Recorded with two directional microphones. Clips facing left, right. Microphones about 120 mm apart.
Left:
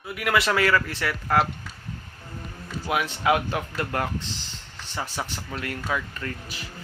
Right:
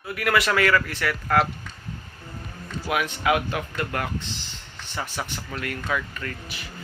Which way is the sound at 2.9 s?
25° left (ahead or behind).